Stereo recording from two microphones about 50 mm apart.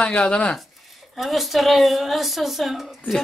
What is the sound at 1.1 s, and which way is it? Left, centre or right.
Speech, centre.